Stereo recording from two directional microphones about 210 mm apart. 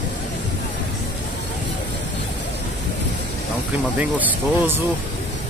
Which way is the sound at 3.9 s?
10° right (ahead or behind).